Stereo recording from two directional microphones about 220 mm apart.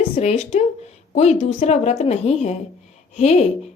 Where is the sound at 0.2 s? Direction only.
30° left (ahead or behind).